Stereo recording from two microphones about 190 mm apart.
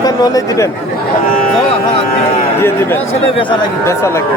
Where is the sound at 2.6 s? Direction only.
10° left (ahead or behind).